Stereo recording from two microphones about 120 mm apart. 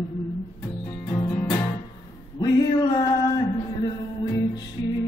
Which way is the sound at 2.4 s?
35° left (ahead or behind).